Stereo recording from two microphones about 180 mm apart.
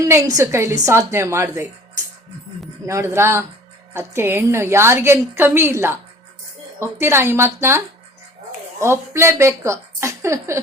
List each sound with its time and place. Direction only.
0.0 s a woman's voice: 20° right (ahead or behind)
2.8 s a woman's voice: 15° right (ahead or behind)
8.8 s a woman's voice: 15° right (ahead or behind)